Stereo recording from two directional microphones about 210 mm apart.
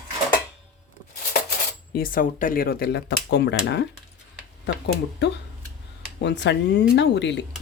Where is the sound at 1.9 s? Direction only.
45° left (ahead or behind).